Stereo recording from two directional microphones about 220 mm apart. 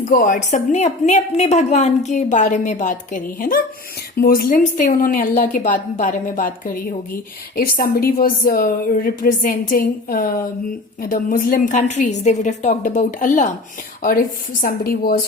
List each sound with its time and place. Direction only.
0.1 s a woman's voice: 40° left (ahead or behind)